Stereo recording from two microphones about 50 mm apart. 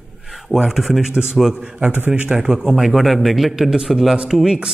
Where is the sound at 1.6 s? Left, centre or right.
Right.